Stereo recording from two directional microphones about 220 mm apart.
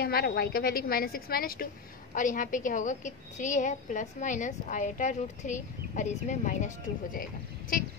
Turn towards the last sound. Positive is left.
turn(degrees=40)  # may be behind; listen again after turning